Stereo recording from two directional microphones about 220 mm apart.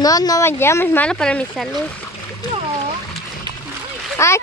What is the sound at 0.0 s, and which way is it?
Speech, 15° left (ahead or behind).